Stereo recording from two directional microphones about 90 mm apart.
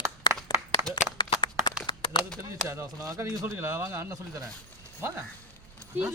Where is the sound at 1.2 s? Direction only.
60° left (ahead or behind).